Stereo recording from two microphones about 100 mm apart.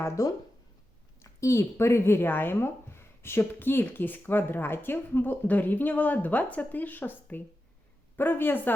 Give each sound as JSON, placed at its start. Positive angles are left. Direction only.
{"t": 0.0, "sound": "speech", "side_deg": 35}